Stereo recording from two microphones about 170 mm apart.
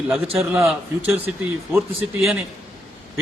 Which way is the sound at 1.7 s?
15° right (ahead or behind).